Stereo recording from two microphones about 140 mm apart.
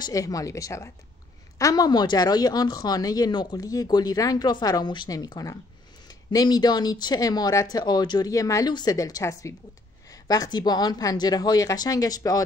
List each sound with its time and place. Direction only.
0.0 s a woman's voice: 25° left (ahead or behind)